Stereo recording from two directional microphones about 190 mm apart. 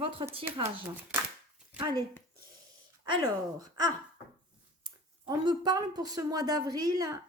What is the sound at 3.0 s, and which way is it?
Speech, 20° right (ahead or behind).